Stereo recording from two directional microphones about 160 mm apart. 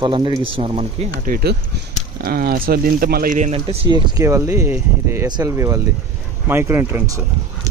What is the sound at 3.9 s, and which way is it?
Speech, 25° right (ahead or behind).